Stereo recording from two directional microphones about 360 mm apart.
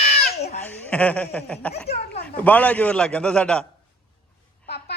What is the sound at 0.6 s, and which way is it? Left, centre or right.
A man's voice, centre.